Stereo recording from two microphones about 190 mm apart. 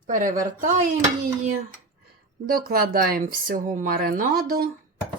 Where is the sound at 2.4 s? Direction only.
50° right (ahead or behind).